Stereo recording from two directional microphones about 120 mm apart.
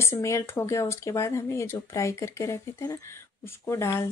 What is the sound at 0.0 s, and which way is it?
Speech, 25° left (ahead or behind).